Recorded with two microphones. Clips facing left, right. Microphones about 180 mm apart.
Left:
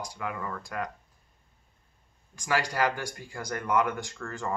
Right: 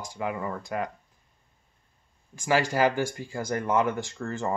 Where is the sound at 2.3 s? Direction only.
25° right (ahead or behind).